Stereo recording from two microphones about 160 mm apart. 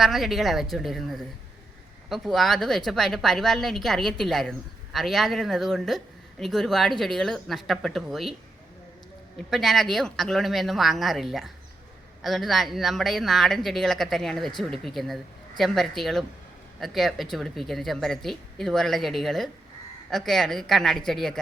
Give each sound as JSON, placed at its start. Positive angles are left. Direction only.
{"t": 0.0, "sound": "a woman's voice", "side_deg": 0}
{"t": 9.5, "sound": "a woman's voice", "side_deg": 0}